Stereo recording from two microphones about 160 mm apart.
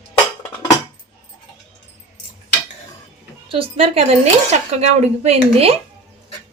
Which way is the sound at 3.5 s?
35° right (ahead or behind).